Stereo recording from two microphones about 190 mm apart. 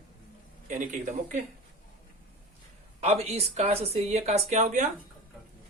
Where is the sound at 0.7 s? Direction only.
40° right (ahead or behind).